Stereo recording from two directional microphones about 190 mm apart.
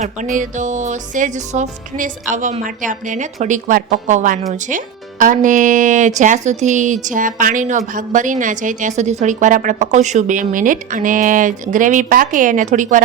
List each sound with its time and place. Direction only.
0.0 s speech: 40° right (ahead or behind)